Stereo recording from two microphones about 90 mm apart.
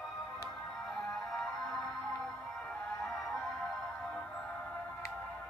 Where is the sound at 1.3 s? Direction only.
5° left (ahead or behind).